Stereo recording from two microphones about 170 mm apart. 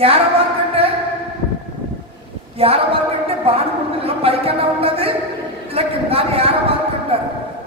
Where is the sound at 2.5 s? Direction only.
35° right (ahead or behind).